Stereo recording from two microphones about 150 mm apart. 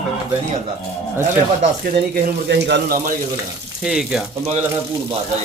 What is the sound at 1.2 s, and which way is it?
Speech, 50° right (ahead or behind).